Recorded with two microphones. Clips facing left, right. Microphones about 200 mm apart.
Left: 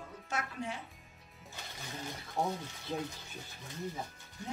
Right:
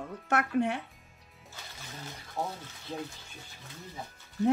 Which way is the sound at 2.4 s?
15° left (ahead or behind).